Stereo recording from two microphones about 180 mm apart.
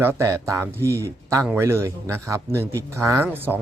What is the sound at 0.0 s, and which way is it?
A man's voice, 15° right (ahead or behind).